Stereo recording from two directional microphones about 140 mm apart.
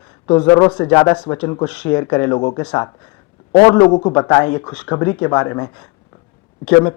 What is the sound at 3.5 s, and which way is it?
Speech, 10° left (ahead or behind).